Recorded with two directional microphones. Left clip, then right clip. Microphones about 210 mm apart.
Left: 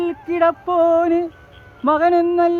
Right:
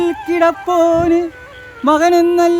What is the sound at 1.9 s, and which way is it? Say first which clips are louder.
Speech: right 4 dB; 25° right (ahead or behind).